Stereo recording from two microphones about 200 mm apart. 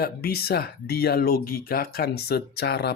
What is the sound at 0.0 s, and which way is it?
Speech, 50° left (ahead or behind).